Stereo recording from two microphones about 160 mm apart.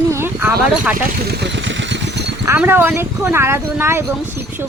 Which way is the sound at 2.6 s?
10° right (ahead or behind).